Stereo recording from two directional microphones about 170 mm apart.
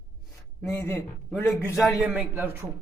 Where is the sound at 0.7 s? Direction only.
20° left (ahead or behind).